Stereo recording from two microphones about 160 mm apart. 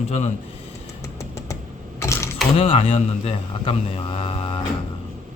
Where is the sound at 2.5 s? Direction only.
35° left (ahead or behind).